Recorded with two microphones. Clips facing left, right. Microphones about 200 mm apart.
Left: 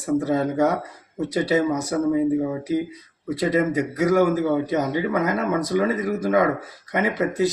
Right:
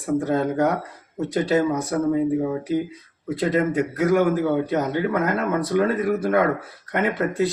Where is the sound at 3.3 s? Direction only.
10° left (ahead or behind).